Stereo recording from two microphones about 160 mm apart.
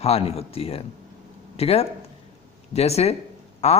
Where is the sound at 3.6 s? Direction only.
45° left (ahead or behind).